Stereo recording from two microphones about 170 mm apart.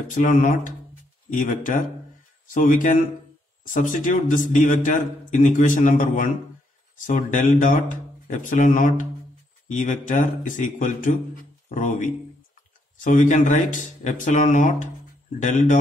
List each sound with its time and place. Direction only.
0.1 s a man's voice: 50° left (ahead or behind)